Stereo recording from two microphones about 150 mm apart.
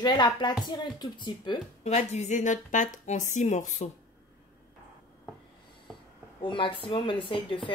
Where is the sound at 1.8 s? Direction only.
50° left (ahead or behind).